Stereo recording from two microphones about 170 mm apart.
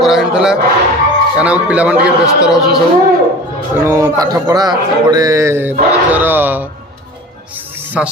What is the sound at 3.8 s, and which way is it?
A man's voice, 15° right (ahead or behind).